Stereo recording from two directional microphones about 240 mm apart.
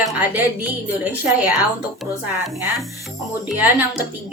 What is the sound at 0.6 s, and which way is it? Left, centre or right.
Speech, centre.